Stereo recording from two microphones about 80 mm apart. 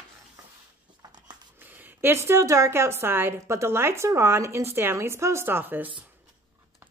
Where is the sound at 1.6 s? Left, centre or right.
Right.